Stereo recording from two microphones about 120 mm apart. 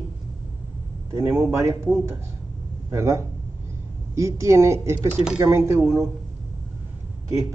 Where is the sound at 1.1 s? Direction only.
20° right (ahead or behind).